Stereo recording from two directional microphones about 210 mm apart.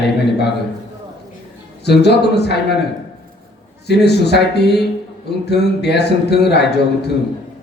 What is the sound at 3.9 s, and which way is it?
A man's voice, 50° left (ahead or behind).